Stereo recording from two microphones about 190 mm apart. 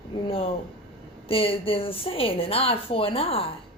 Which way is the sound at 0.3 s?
30° left (ahead or behind).